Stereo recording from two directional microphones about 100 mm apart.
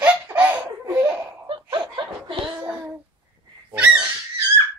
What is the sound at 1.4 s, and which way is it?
Laughter, 55° right (ahead or behind).